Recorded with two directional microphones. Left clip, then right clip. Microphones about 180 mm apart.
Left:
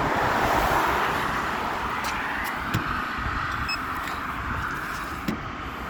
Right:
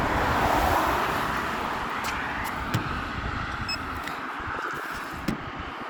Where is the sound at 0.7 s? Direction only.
40° right (ahead or behind).